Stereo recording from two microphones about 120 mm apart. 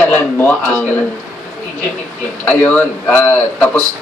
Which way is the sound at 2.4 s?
15° left (ahead or behind).